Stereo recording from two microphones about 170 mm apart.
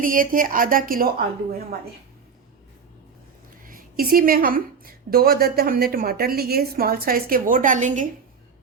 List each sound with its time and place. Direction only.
0.0 s a woman's voice: 55° right (ahead or behind)
3.6 s a woman's voice: 55° right (ahead or behind)